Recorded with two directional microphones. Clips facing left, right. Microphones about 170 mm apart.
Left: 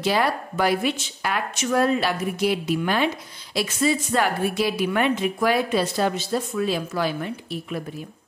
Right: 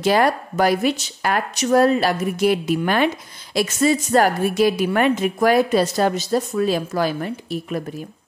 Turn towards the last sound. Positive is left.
turn(degrees=-45)  # may be behind; listen again after turning